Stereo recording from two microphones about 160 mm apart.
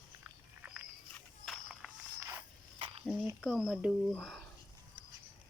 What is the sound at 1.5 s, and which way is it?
Walk, centre (ahead or behind).